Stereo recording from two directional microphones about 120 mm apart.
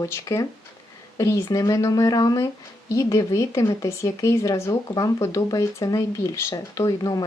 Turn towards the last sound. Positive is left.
turn(degrees=30)  # may be behind; listen again after turning